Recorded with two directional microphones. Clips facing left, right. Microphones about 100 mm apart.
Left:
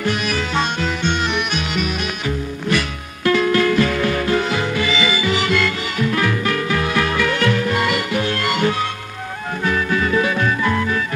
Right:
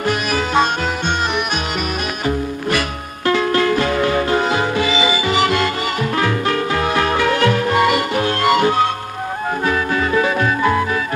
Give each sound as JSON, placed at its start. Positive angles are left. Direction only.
{"t": 0.0, "sound": "music", "side_deg": -45}
{"t": 3.3, "sound": "music", "side_deg": -30}